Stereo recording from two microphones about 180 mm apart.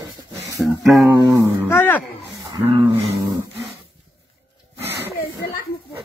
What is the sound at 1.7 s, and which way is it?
Speech, 10° left (ahead or behind).